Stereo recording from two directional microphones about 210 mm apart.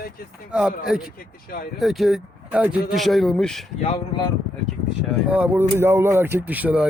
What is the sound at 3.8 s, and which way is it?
Speech, 25° left (ahead or behind).